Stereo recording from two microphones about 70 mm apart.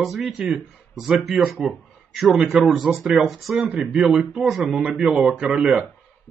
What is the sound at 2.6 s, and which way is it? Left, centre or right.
Speech, centre.